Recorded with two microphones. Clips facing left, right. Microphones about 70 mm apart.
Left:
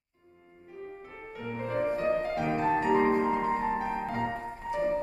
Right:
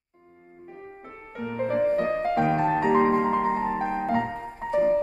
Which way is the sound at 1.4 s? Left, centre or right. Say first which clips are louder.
Right 6 dB; right.